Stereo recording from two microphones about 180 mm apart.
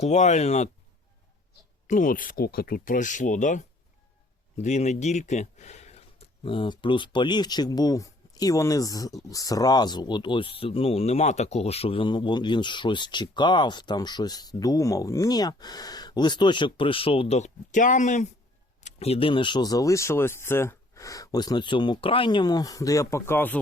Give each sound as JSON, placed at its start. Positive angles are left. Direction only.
{"t": 0.0, "sound": "speech", "side_deg": 40}
{"t": 1.9, "sound": "speech", "side_deg": 45}